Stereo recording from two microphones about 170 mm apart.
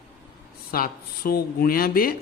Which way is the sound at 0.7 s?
60° left (ahead or behind).